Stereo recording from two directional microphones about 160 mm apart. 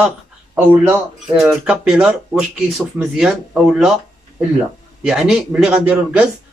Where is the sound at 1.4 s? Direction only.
5° right (ahead or behind).